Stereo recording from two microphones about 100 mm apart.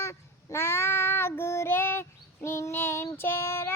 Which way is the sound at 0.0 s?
25° left (ahead or behind).